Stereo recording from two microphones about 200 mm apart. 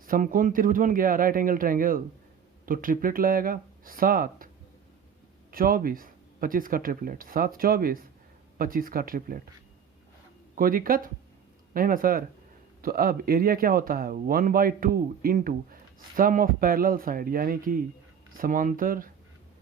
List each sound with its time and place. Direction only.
0.0 s speech: 45° right (ahead or behind)
5.5 s speech: 45° right (ahead or behind)
10.5 s speech: 45° right (ahead or behind)